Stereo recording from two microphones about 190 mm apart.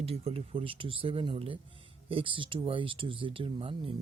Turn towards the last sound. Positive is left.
turn(degrees=-25)  # may be behind; listen again after turning